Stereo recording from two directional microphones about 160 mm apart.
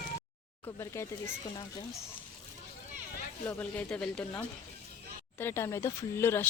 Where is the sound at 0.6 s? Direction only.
20° left (ahead or behind).